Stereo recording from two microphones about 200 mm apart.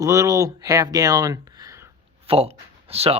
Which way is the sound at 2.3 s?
30° right (ahead or behind).